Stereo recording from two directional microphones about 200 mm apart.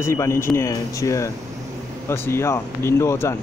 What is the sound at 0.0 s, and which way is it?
A man's voice, 15° left (ahead or behind).